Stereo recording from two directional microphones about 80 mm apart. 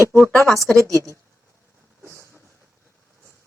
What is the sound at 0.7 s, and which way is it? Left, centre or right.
Speech, right.